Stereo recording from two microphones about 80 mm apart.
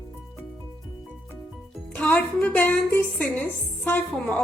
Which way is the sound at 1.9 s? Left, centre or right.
Centre.